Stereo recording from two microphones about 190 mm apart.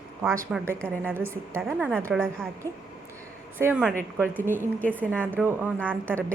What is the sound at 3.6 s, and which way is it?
Speech, 10° right (ahead or behind).